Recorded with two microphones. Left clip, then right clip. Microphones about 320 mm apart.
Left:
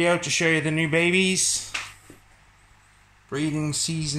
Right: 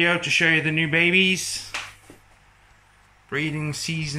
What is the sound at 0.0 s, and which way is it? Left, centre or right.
Speech, centre.